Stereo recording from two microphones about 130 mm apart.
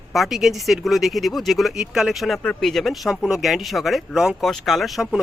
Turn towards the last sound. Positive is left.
turn(degrees=0)  # may be behind; listen again after turning